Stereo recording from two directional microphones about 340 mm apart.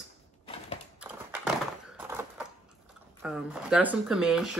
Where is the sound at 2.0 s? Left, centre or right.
Centre.